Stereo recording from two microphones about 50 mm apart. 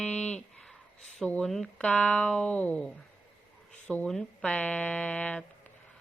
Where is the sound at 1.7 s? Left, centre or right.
Left.